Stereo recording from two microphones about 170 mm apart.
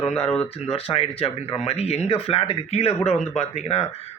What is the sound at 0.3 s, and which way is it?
Speech, 35° left (ahead or behind).